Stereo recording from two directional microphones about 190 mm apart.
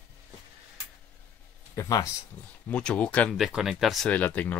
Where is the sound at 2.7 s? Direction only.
5° left (ahead or behind).